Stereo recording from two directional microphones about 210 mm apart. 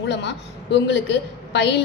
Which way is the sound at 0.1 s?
55° left (ahead or behind).